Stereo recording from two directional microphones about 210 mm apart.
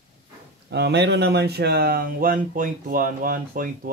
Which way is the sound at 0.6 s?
55° right (ahead or behind).